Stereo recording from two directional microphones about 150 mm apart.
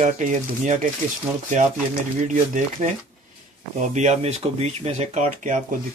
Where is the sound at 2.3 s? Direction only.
55° right (ahead or behind).